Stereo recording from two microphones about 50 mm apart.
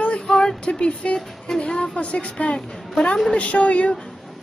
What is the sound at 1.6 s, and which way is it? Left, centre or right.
A woman's voice, left.